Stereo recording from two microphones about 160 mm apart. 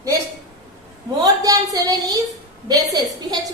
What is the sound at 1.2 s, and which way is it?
A woman's voice, 20° right (ahead or behind).